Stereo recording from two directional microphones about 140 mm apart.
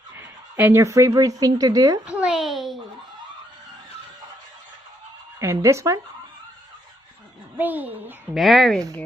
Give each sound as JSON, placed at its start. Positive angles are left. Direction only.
{"t": 0.1, "sound": "speech", "side_deg": -15}
{"t": 2.0, "sound": "a sound", "side_deg": -5}
{"t": 5.4, "sound": "speech", "side_deg": -20}
{"t": 7.5, "sound": "a child's voice", "side_deg": -15}
{"t": 8.4, "sound": "speech", "side_deg": 0}